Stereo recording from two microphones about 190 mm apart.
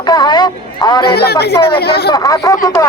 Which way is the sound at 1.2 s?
55° left (ahead or behind).